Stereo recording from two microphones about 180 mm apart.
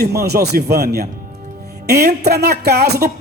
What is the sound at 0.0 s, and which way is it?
Speech, 60° right (ahead or behind).